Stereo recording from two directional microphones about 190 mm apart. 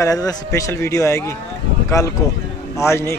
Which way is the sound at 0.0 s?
20° left (ahead or behind).